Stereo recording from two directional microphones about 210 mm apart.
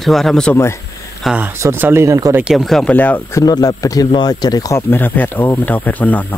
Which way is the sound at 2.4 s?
Centre (ahead or behind).